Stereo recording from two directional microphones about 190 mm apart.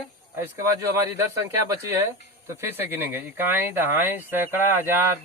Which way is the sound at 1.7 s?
20° right (ahead or behind).